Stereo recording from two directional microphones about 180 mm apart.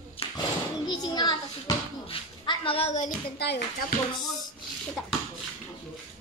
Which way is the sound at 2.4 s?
30° left (ahead or behind).